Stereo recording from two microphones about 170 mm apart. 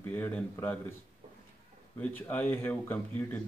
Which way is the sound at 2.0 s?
10° left (ahead or behind).